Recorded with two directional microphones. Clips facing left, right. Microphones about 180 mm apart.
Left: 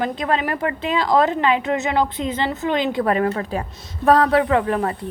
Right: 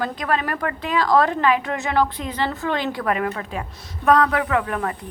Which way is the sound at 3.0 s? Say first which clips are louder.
Left 4 dB; 30° left (ahead or behind).